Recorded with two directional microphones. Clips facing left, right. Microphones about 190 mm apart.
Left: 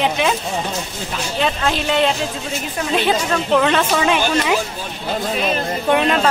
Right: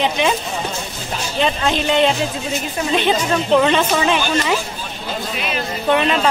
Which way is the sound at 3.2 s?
10° right (ahead or behind).